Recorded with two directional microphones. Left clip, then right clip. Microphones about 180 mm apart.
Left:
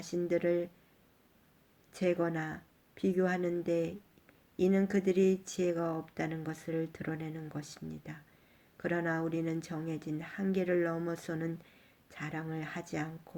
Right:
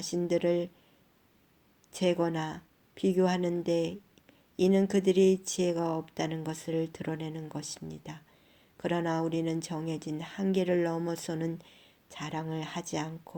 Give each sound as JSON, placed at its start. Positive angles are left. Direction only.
{"t": 0.0, "sound": "speech", "side_deg": -30}
{"t": 1.9, "sound": "speech", "side_deg": -30}